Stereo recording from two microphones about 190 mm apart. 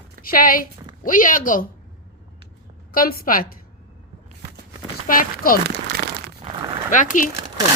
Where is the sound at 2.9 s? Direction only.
50° left (ahead or behind).